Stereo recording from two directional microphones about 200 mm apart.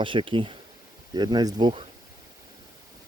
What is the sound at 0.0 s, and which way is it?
Speech, 25° right (ahead or behind).